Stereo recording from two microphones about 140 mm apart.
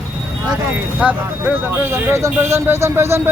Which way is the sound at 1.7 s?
15° right (ahead or behind).